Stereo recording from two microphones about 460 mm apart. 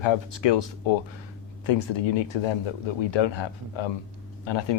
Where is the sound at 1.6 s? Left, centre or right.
Left.